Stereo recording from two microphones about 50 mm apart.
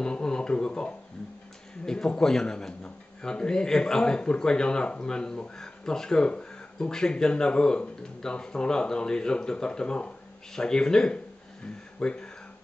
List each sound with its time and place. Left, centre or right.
0.0 s a man's voice: centre